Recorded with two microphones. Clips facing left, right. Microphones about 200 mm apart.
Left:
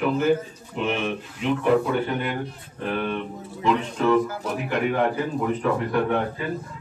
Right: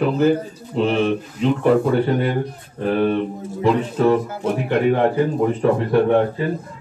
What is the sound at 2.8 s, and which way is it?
Speech, 40° right (ahead or behind).